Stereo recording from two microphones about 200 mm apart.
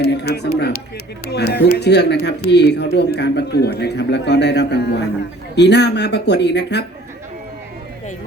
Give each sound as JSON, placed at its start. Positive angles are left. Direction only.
{"t": 0.0, "sound": "speech", "side_deg": 55}